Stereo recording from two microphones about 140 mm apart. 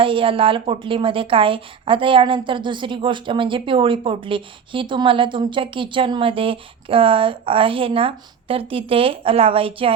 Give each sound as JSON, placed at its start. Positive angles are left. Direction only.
{"t": 0.0, "sound": "a woman's voice", "side_deg": -40}